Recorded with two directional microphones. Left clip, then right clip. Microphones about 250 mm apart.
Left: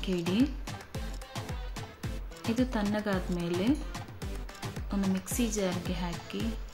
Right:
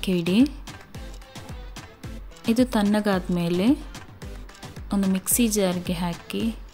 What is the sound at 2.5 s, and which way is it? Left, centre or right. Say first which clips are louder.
Speech: right 9 dB; right.